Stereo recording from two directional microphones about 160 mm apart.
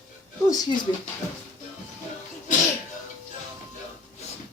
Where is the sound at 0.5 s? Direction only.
25° left (ahead or behind).